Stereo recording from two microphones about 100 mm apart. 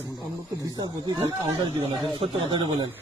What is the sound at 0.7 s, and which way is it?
Speech, 45° right (ahead or behind).